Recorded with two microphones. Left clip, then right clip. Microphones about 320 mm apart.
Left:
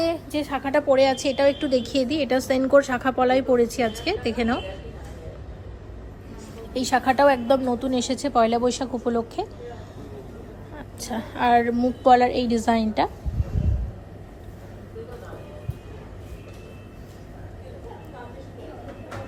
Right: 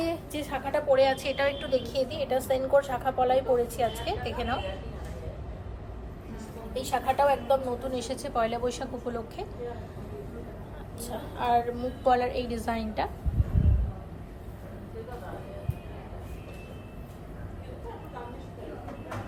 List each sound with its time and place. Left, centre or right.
0.0 s a woman's voice: left
6.7 s a woman's voice: left
11.0 s a woman's voice: left